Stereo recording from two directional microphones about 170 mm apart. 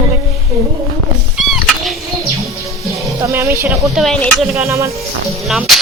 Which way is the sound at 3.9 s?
Centre (ahead or behind).